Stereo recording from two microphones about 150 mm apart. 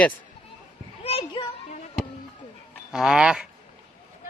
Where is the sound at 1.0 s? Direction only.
35° left (ahead or behind).